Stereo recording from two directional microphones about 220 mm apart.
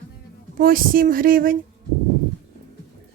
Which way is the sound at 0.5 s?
40° right (ahead or behind).